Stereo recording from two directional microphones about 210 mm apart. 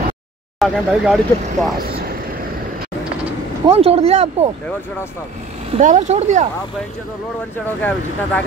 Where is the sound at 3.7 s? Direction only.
30° right (ahead or behind).